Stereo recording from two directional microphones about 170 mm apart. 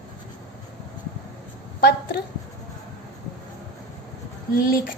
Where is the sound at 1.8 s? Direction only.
70° left (ahead or behind).